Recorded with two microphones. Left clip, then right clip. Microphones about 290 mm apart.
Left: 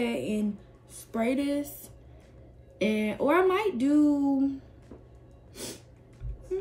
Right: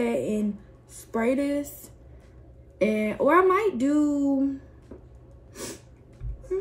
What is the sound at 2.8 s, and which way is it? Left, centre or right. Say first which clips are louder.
Speech: right 4 dB; centre.